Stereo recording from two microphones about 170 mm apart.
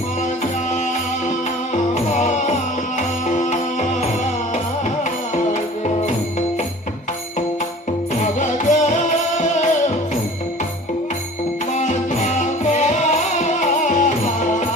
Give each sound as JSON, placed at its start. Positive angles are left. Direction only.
{"t": 1.7, "sound": "music", "side_deg": 40}
{"t": 8.2, "sound": "music", "side_deg": 45}
{"t": 11.8, "sound": "music", "side_deg": 45}